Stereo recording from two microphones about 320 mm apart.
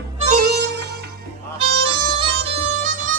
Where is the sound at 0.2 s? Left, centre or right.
Right.